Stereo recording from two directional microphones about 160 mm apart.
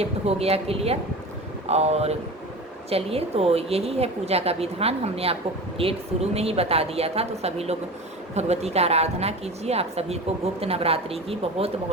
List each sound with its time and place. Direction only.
0.0 s a woman's voice: 40° right (ahead or behind)